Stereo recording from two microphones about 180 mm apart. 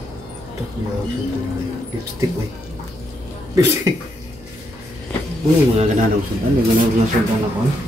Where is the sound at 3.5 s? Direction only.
15° right (ahead or behind).